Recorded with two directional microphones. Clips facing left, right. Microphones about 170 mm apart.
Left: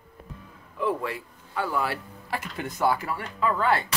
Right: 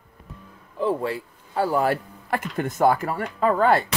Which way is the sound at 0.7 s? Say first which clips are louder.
Right 4 dB; 30° right (ahead or behind).